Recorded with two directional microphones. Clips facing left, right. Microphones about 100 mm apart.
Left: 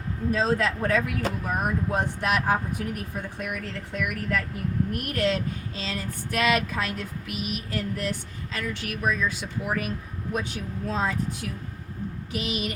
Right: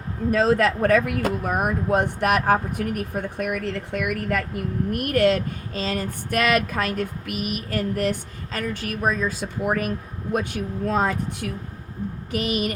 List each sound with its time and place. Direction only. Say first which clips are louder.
0.3 s speech: right 5 dB; 65° right (ahead or behind); by 9.9 s 45° right (ahead or behind)
10.3 s speech: right 6 dB; 55° right (ahead or behind)